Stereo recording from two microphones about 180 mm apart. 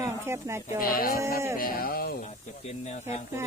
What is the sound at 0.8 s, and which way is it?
Speech, 55° left (ahead or behind).